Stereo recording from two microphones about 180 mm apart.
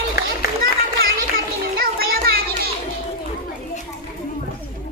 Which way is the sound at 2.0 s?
60° right (ahead or behind).